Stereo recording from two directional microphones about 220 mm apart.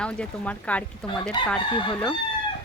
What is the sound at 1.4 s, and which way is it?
Chicken, 20° left (ahead or behind).